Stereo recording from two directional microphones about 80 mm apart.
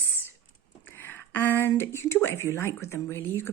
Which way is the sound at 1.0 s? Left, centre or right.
Left.